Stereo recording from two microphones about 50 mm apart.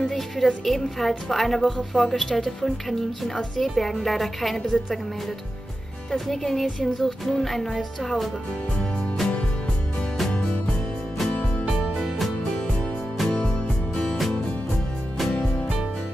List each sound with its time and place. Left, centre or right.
0.0 s a woman's voice: centre
6.1 s a woman's voice: centre
10.3 s music: left
12.0 s music: centre
13.3 s music: left
14.0 s music: centre